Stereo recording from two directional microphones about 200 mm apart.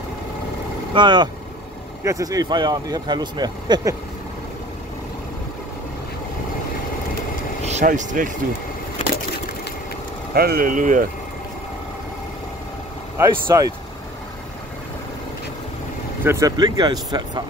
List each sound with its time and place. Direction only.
0.9 s speech: 20° right (ahead or behind)
7.6 s speech: 35° right (ahead or behind)
10.3 s speech: 50° right (ahead or behind)
13.2 s speech: 15° right (ahead or behind)
16.3 s speech: 15° right (ahead or behind)